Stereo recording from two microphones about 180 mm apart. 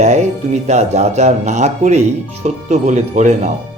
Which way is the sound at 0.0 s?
40° right (ahead or behind).